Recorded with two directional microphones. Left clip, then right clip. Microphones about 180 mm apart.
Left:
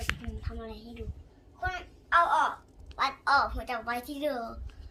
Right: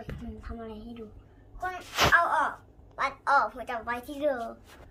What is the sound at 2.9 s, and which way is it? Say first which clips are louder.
A woman's voice: right 1 dB; 10° right (ahead or behind).